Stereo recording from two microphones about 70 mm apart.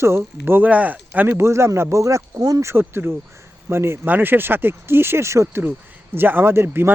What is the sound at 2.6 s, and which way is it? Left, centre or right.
Speech, right.